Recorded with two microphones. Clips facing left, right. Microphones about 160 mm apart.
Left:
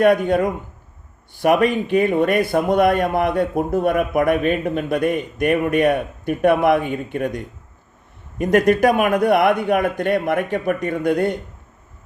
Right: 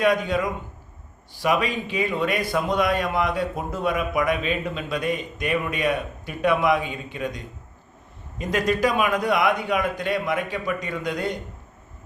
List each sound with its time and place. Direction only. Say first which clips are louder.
0.0 s speech: left 6 dB; 55° left (ahead or behind)